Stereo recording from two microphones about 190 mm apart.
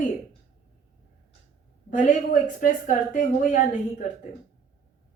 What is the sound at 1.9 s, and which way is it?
Speech, 45° left (ahead or behind).